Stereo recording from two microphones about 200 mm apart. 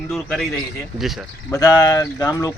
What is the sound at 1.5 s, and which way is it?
Speech, 20° left (ahead or behind).